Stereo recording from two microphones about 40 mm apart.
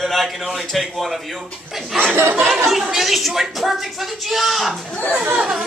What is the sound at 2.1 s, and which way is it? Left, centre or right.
Speech, right.